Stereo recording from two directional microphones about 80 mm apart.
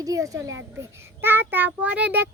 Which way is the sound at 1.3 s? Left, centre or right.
Right.